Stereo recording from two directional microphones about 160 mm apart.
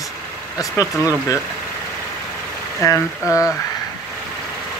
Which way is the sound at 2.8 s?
20° left (ahead or behind).